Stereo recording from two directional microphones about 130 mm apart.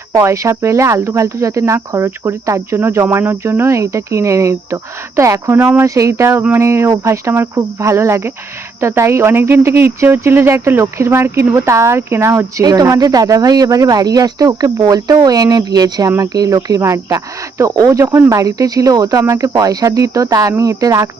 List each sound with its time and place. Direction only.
0.1 s speech: 25° right (ahead or behind)